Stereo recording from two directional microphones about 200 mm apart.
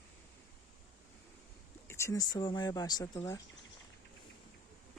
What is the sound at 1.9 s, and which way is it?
Speech, 15° left (ahead or behind).